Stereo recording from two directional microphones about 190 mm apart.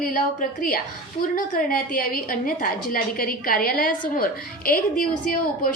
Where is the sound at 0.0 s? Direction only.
50° left (ahead or behind).